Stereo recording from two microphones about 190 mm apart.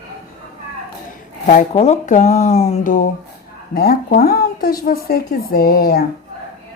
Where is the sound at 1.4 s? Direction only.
35° left (ahead or behind).